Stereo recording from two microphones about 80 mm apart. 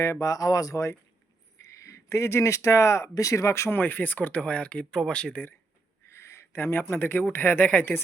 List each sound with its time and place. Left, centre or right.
0.0 s speech: left
3.8 s speech: left
6.1 s speech: left